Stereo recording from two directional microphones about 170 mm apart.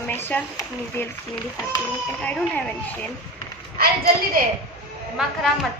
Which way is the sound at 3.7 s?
60° right (ahead or behind).